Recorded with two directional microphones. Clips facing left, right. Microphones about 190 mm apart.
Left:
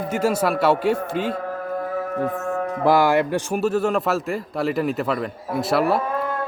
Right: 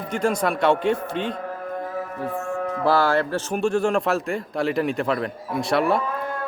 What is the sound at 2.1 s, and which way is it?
Music, 40° left (ahead or behind).